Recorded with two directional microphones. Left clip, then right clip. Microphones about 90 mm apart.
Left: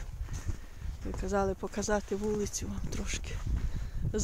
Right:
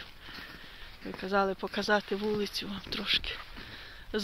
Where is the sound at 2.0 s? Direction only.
10° left (ahead or behind).